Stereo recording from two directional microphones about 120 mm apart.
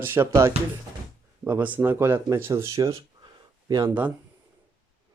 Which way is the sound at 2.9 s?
35° right (ahead or behind).